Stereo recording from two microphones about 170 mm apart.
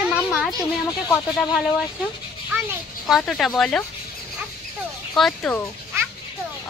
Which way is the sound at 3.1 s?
Centre (ahead or behind).